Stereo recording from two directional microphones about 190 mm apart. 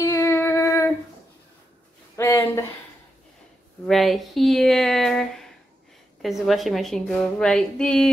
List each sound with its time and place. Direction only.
0.0 s child singing: 15° left (ahead or behind)
2.1 s a sound: 15° left (ahead or behind)
3.8 s a woman's voice: centre (ahead or behind)